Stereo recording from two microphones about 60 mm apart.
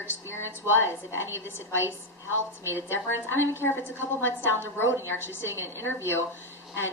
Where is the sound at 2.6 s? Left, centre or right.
Right.